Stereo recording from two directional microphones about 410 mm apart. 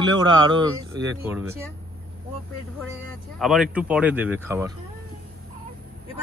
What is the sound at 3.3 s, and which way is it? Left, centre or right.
Speech, centre.